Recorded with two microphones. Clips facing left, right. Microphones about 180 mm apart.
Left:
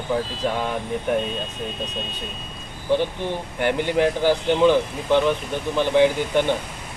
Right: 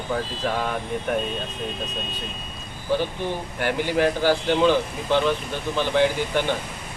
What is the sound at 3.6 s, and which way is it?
Speech, 20° left (ahead or behind).